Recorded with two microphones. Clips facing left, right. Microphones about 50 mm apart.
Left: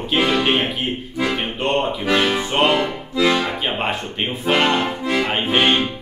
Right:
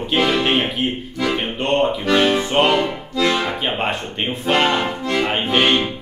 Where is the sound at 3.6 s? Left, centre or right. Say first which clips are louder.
Right 1 dB; centre.